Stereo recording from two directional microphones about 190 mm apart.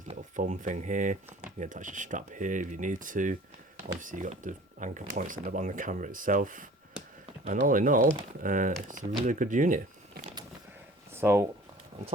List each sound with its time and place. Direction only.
0.0 s speech: 40° right (ahead or behind)
11.1 s speech: 10° right (ahead or behind)